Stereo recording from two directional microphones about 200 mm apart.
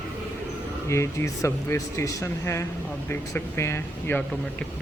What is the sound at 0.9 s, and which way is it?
Speech, 15° left (ahead or behind).